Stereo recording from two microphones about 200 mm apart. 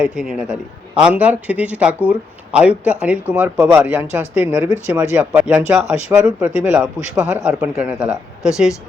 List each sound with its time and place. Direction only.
0.0 s speech: 5° right (ahead or behind)